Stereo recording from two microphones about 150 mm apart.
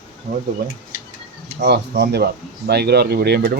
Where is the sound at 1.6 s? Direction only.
90° right.